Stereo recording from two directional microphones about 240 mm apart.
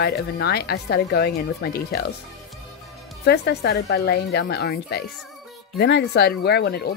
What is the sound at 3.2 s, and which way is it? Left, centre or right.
Speech, left.